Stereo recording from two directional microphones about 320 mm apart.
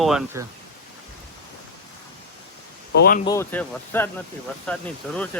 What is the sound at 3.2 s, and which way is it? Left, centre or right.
Speech, centre.